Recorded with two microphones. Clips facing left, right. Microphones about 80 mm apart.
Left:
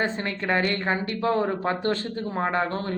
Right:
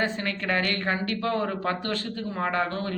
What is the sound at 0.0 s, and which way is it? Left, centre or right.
A woman's voice, left.